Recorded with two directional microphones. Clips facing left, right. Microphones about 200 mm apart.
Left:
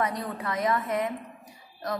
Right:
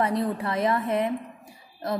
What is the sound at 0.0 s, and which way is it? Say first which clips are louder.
A woman's voice: right 5 dB; 30° right (ahead or behind).